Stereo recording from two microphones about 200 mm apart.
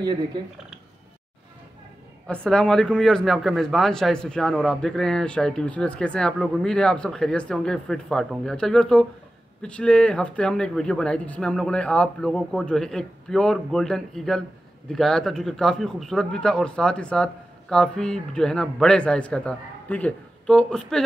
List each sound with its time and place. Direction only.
0.0 s speech: 20° right (ahead or behind)
2.2 s speech: 5° left (ahead or behind)